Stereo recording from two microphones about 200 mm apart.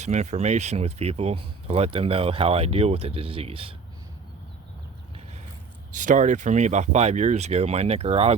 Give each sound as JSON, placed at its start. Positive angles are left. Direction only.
{"t": 0.0, "sound": "speech", "side_deg": -35}
{"t": 5.9, "sound": "speech", "side_deg": -40}